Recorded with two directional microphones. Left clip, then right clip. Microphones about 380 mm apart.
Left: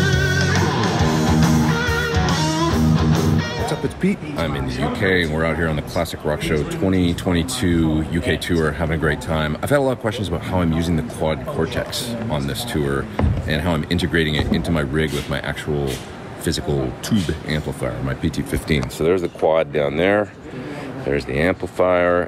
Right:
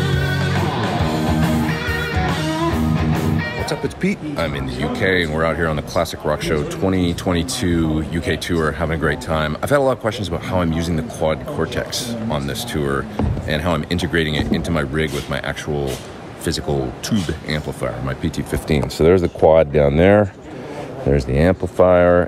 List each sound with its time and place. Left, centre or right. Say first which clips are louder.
0.1 s music: left 2 dB; centre
5.0 s speech: right 2 dB; centre
18.9 s speech: right 6 dB; right
21.3 s speech: right 2 dB; right